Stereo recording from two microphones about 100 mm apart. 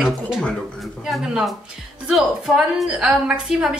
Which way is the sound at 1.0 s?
5° right (ahead or behind).